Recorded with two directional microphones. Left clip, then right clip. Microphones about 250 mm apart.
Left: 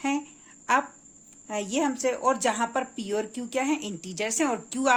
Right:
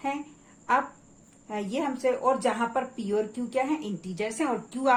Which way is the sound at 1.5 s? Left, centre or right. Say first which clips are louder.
Left 3 dB; left.